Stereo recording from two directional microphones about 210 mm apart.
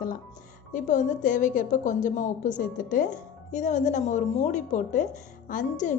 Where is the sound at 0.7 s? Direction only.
35° left (ahead or behind).